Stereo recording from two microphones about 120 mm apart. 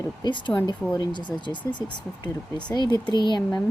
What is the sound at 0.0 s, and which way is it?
Speech, 40° left (ahead or behind).